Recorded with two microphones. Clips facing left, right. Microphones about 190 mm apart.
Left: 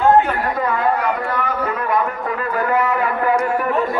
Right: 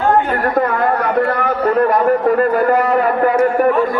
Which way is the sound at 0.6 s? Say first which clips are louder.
Right 3 dB; 50° right (ahead or behind).